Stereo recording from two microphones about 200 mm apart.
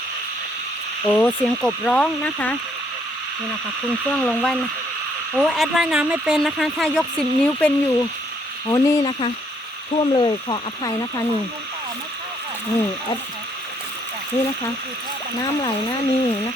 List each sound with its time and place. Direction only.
1.0 s speech: 10° left (ahead or behind)
4.2 s speech: 5° left (ahead or behind); by 10.9 s 20° left (ahead or behind)
15.4 s speech: 15° left (ahead or behind)